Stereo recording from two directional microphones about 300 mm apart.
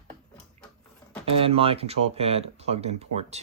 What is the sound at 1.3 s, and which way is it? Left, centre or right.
Speech, centre.